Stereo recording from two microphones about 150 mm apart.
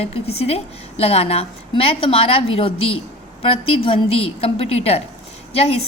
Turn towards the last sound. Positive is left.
turn(degrees=40)  # may be behind; listen again after turning